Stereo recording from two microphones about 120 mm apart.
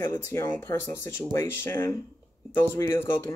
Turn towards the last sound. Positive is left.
turn(degrees=20)  # may be behind; listen again after turning